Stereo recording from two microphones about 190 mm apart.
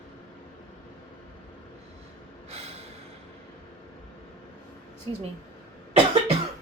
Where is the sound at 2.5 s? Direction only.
30° right (ahead or behind).